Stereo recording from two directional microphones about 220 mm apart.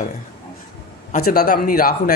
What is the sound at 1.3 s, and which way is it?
Speech, 45° left (ahead or behind).